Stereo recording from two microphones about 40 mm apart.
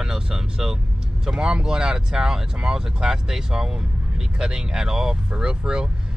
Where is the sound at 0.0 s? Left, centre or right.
Centre.